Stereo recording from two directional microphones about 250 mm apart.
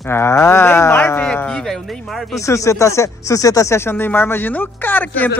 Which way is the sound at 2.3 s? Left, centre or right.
Centre.